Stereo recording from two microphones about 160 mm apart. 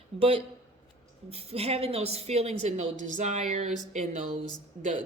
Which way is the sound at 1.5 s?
40° right (ahead or behind).